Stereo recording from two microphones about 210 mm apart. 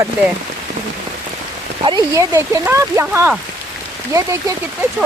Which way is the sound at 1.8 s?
20° right (ahead or behind).